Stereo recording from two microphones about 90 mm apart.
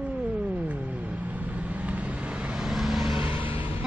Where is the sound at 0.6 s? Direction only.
15° right (ahead or behind).